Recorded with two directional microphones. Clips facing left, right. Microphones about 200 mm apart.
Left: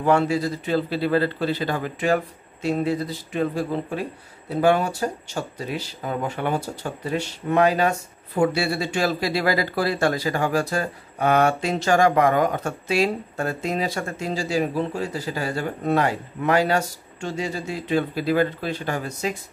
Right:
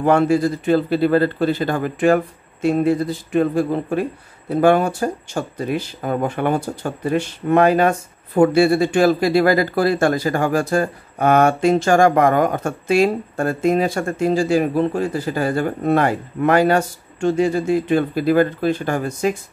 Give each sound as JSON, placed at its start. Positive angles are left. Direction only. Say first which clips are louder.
{"t": 0.0, "sound": "speech", "louder": "right 5 dB", "side_deg": -50}